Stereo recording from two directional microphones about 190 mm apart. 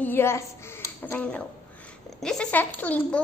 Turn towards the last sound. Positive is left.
turn(degrees=10)  # may be behind; listen again after turning